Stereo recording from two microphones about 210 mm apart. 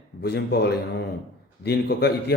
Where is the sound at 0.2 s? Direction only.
50° left (ahead or behind).